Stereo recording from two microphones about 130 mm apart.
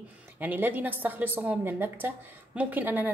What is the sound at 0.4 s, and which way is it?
A woman's voice, 15° right (ahead or behind).